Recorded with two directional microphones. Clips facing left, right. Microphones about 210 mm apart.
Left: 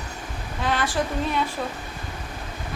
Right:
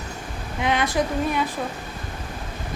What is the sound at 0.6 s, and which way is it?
Speech, 20° right (ahead or behind).